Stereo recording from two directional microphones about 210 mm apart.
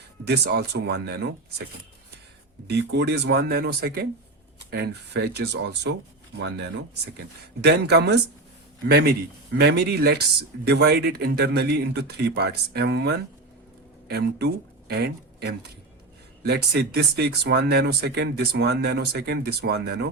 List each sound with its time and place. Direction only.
0.3 s speech: 50° right (ahead or behind)
2.6 s speech: 50° right (ahead or behind)
7.6 s speech: 50° right (ahead or behind)